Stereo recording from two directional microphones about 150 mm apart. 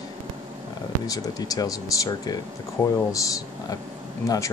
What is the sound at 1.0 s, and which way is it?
Speech, 25° left (ahead or behind).